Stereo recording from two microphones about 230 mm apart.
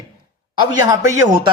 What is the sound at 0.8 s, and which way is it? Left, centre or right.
Speech, centre.